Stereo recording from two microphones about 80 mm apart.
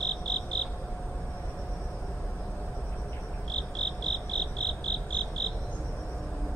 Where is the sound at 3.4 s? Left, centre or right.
Centre.